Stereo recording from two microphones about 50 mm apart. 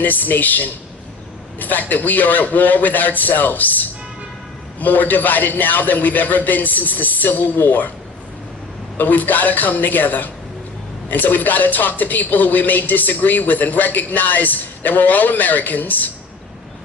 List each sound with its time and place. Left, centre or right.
0.0 s speech: left
9.0 s speech: left